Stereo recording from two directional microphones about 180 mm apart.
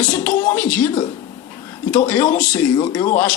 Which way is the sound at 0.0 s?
10° left (ahead or behind).